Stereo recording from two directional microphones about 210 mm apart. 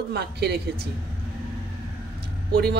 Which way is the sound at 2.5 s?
45° right (ahead or behind).